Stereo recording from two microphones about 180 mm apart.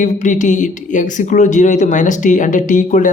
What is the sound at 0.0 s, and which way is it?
Speech, 45° left (ahead or behind).